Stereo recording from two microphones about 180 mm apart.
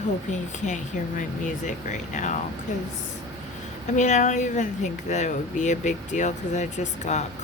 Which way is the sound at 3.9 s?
45° left (ahead or behind).